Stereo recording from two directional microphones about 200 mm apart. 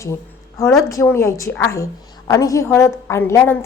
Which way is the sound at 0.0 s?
15° left (ahead or behind).